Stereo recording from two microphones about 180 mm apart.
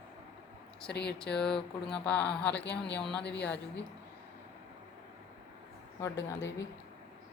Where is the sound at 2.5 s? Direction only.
70° left (ahead or behind).